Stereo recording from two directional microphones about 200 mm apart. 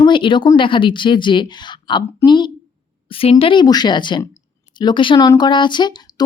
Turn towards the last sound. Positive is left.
turn(degrees=20)  # may be behind; listen again after turning